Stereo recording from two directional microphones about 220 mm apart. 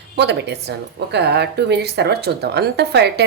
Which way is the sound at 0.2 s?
50° right (ahead or behind).